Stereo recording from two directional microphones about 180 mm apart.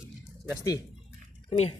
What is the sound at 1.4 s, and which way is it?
Speech, 35° left (ahead or behind).